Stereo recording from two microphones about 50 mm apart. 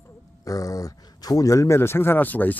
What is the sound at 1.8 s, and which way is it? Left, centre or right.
Speech, left.